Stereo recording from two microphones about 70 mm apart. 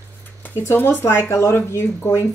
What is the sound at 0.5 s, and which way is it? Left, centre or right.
Speech, left.